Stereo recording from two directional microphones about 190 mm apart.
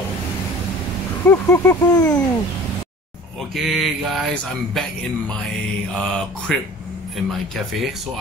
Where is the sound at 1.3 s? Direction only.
15° left (ahead or behind).